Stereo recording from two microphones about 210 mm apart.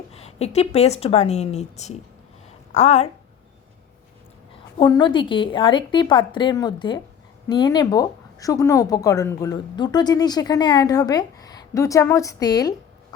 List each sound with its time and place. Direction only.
0.1 s a woman's voice: 30° left (ahead or behind)
4.8 s a woman's voice: 20° left (ahead or behind)